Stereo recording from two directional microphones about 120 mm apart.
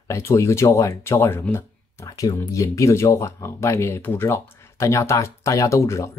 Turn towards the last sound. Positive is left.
turn(degrees=25)  # may be behind; listen again after turning